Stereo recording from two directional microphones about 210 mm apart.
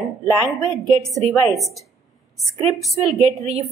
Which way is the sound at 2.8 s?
Centre (ahead or behind).